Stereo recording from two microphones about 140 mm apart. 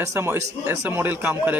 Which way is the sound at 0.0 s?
20° right (ahead or behind).